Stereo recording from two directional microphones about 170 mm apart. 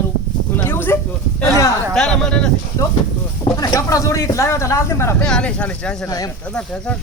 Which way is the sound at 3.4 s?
20° left (ahead or behind).